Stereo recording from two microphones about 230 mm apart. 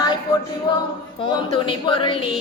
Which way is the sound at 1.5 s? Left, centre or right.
Left.